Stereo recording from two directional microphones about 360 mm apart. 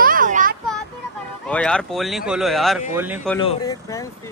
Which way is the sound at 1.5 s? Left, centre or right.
Centre.